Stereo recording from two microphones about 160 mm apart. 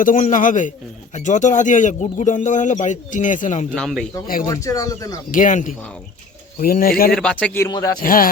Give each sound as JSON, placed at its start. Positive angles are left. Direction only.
{"t": 0.0, "sound": "a man's voice", "side_deg": 55}
{"t": 3.8, "sound": "speech", "side_deg": 5}
{"t": 4.4, "sound": "speech", "side_deg": 20}
{"t": 5.3, "sound": "a man's voice", "side_deg": 55}
{"t": 6.6, "sound": "speech", "side_deg": 65}
{"t": 7.1, "sound": "speech", "side_deg": 5}
{"t": 7.7, "sound": "speech", "side_deg": 20}
{"t": 8.0, "sound": "speech", "side_deg": 60}